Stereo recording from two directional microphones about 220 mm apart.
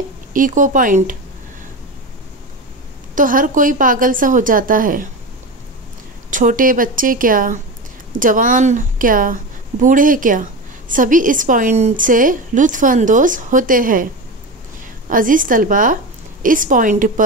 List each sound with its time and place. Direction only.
0.3 s a woman's voice: 35° right (ahead or behind)
3.2 s a woman's voice: 35° right (ahead or behind)
6.3 s a woman's voice: 35° right (ahead or behind)
15.0 s a woman's voice: 35° right (ahead or behind)